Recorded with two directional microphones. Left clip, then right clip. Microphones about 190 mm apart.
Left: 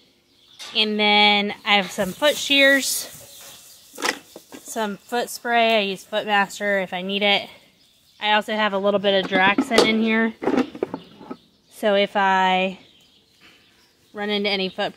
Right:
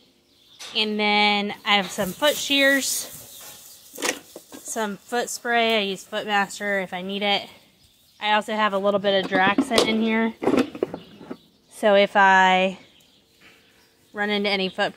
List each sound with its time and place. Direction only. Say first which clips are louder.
0.7 s speech: left 3 dB; 20° left (ahead or behind)
4.0 s speech: left 2 dB; 5° left (ahead or behind)
11.7 s speech: right 2 dB; centre (ahead or behind)
14.1 s speech: even; centre (ahead or behind)